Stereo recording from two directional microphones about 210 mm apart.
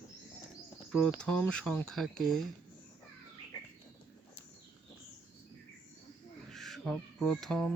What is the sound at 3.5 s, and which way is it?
Bird, 20° left (ahead or behind).